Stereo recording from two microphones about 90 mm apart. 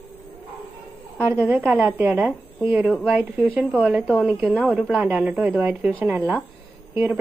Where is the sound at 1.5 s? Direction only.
20° right (ahead or behind).